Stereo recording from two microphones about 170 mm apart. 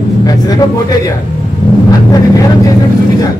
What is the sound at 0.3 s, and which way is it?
A man's voice, 20° left (ahead or behind).